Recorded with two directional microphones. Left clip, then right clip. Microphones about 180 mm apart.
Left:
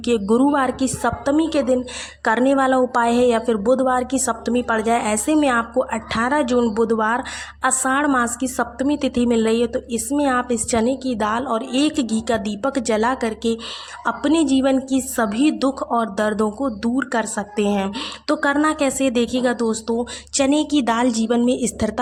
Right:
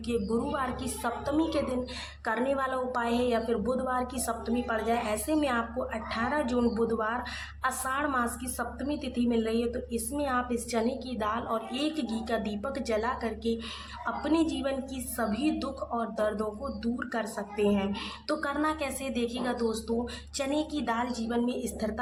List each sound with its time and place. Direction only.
0.0 s a woman's voice: 45° left (ahead or behind)